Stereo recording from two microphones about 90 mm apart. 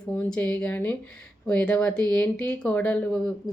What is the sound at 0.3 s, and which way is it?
Speech, 15° left (ahead or behind).